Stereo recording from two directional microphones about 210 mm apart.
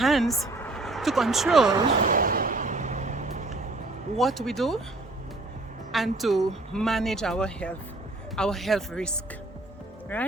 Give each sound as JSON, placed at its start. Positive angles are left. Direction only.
{"t": 0.0, "sound": "speech", "side_deg": 0}
{"t": 2.0, "sound": "vehicle", "side_deg": -40}
{"t": 4.2, "sound": "speech", "side_deg": 0}
{"t": 5.9, "sound": "speech", "side_deg": 0}